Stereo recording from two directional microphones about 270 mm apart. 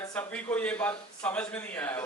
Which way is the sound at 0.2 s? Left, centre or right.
Centre.